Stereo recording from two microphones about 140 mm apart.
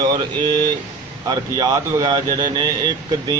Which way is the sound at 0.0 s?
30° right (ahead or behind).